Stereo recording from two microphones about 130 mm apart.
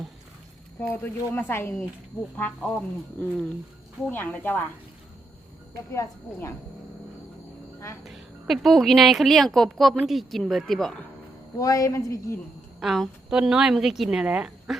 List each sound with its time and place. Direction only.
0.8 s speech: 15° left (ahead or behind)
2.7 s speech: 15° left (ahead or behind)
5.7 s speech: 25° left (ahead or behind)
8.0 s a woman's voice: centre (ahead or behind)
11.5 s speech: 25° left (ahead or behind)
12.8 s a woman's voice: centre (ahead or behind)